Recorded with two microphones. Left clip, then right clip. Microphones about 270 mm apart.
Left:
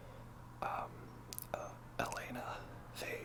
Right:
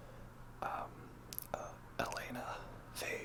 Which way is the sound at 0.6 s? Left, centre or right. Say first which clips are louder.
Left 1 dB; centre.